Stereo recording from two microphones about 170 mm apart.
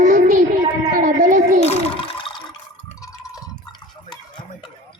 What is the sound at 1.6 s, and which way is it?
Toilet flush, 40° left (ahead or behind).